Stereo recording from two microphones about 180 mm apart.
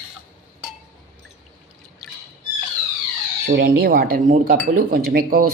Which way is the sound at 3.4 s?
60° right (ahead or behind).